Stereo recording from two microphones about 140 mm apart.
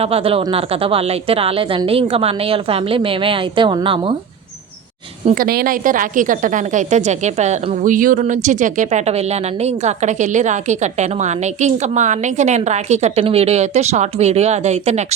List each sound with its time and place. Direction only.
0.0 s a woman's voice: 45° right (ahead or behind)
5.3 s speech: 90° right; by 7.9 s 50° right (ahead or behind)
7.9 s speech: 75° right (ahead or behind); by 15.0 s 55° right (ahead or behind)